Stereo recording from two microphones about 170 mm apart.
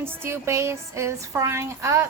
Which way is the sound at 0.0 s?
15° right (ahead or behind).